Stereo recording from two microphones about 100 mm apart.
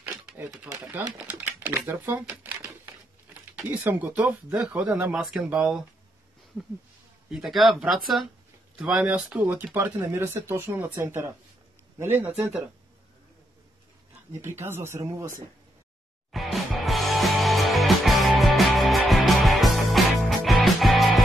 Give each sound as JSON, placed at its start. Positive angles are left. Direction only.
{"t": 0.3, "sound": "a sound", "side_deg": -5}
{"t": 1.0, "sound": "speech", "side_deg": -15}
{"t": 2.2, "sound": "typewriter", "side_deg": -15}
{"t": 3.8, "sound": "speech", "side_deg": -15}
{"t": 7.2, "sound": "speech", "side_deg": -5}
{"t": 14.4, "sound": "speech", "side_deg": -25}
{"t": 16.3, "sound": "music", "side_deg": 0}